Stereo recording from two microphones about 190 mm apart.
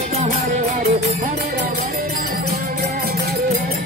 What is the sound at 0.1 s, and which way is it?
Music, 35° right (ahead or behind).